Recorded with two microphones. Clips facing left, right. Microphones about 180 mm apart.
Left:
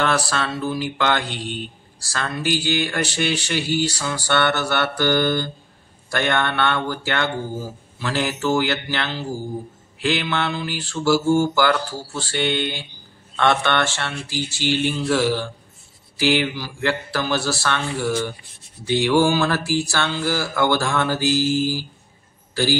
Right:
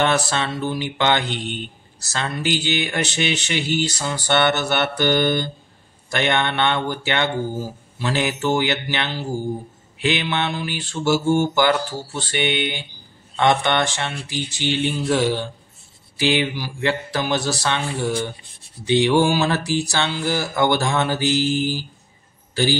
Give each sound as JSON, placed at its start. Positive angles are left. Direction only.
{"t": 0.0, "sound": "mantra", "side_deg": -20}